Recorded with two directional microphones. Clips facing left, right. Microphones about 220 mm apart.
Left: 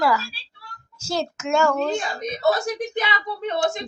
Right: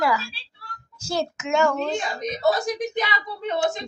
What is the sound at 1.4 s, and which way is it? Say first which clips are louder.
Speech: left 2 dB; 15° right (ahead or behind).